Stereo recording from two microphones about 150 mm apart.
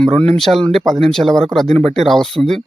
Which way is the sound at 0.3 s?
5° left (ahead or behind).